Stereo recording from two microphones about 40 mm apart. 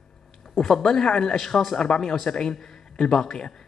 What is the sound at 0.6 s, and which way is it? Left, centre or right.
Speech, centre.